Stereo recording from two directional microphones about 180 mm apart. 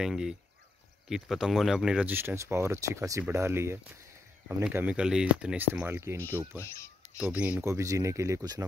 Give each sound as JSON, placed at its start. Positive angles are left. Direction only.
{"t": 0.0, "sound": "speech", "side_deg": -5}